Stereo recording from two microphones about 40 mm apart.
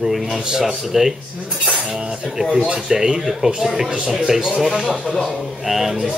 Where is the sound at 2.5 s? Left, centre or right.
Right.